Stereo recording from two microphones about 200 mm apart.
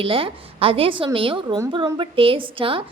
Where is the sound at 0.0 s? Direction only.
25° right (ahead or behind).